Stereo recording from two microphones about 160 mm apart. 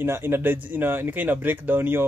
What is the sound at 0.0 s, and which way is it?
Speech, 15° right (ahead or behind).